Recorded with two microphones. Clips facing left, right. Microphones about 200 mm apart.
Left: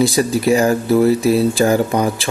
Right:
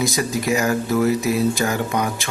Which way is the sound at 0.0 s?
30° left (ahead or behind).